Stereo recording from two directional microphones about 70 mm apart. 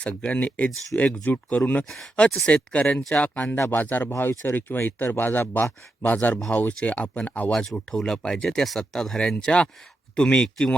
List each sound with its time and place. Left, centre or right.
0.0 s speech: centre
1.8 s speech: centre
2.1 s speech: centre
7.5 s speech: centre